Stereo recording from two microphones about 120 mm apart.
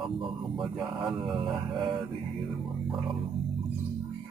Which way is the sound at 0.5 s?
Centre (ahead or behind).